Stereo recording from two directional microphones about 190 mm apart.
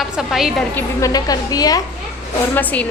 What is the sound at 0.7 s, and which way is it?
A woman's voice, 15° left (ahead or behind).